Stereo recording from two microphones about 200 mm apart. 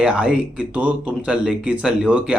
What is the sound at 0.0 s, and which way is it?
Speech, 5° right (ahead or behind).